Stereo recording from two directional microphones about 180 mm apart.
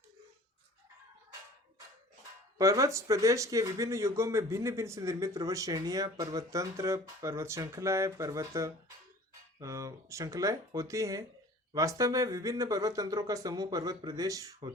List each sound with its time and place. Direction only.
2.6 s speech: 20° right (ahead or behind)